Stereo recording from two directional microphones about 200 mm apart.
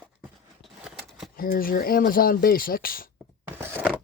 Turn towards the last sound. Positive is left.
turn(degrees=-10)  # may be behind; listen again after turning